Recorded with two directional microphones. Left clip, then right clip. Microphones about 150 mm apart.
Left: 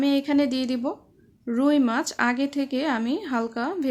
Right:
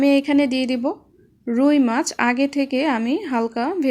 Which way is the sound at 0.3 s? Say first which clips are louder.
Right 4 dB; 15° right (ahead or behind).